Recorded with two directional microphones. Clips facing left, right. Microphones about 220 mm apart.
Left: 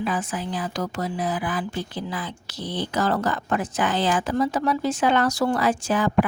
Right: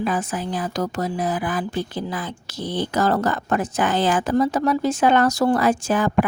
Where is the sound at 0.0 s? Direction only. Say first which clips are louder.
Right 3 dB; 45° right (ahead or behind).